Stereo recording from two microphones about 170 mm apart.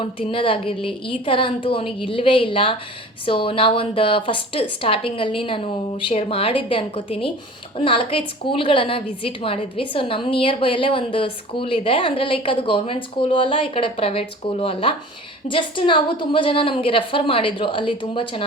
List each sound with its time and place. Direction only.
0.0 s a woman's voice: 30° left (ahead or behind)